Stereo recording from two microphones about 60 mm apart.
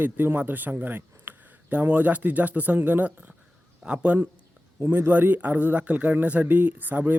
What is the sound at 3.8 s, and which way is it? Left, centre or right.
Speech, centre.